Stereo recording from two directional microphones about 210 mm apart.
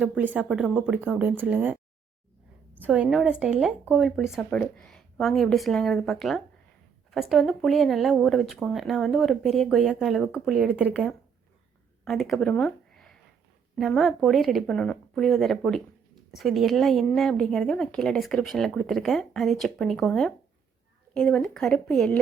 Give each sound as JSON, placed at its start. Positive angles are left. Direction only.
{"t": 0.0, "sound": "speech", "side_deg": -5}